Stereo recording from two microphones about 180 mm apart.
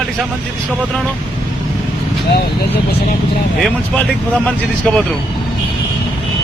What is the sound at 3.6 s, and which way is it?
Speech, 5° left (ahead or behind).